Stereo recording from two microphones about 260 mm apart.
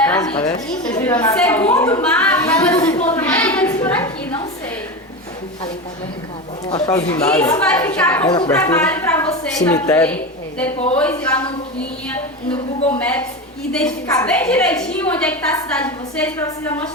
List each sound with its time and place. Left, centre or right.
0.0 s a sound: centre
0.7 s a woman's voice: centre
0.9 s a woman's voice: centre
2.8 s a sound: centre
3.2 s a sound: centre
6.7 s a woman's voice: centre
8.2 s a woman's voice: centre
8.5 s a woman's voice: centre
12.9 s a woman's voice: centre